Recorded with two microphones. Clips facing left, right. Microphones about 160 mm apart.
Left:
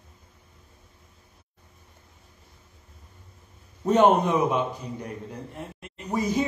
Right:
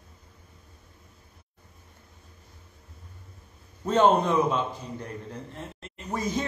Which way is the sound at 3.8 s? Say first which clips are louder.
Left 2 dB; 15° left (ahead or behind).